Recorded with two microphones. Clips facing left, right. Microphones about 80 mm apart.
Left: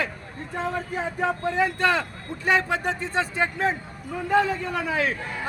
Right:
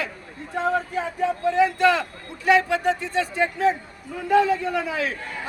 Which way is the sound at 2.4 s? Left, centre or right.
Left.